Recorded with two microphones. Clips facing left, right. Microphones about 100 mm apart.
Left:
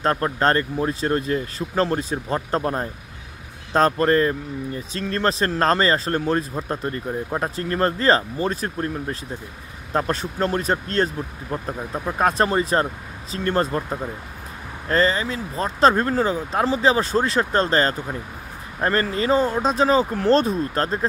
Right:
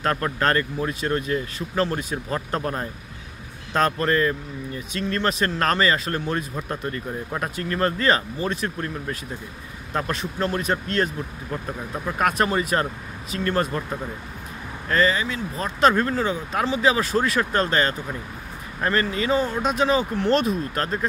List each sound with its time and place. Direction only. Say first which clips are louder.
0.0 s speech: left 3 dB; 30° left (ahead or behind)
14.9 s speech: left 1 dB; 35° left (ahead or behind)